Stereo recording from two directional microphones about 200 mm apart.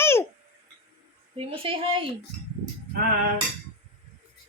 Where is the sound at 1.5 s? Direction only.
25° right (ahead or behind).